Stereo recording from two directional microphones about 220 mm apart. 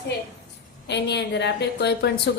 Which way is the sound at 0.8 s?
50° left (ahead or behind).